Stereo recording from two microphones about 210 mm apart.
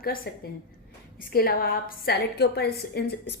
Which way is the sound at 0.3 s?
50° left (ahead or behind).